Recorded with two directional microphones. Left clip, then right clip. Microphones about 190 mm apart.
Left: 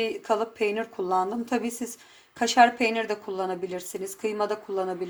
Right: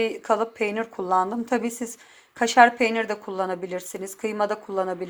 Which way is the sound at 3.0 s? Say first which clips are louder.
Right 2 dB; 15° right (ahead or behind).